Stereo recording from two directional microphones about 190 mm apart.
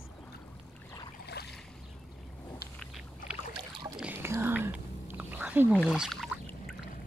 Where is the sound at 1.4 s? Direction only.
60° left (ahead or behind).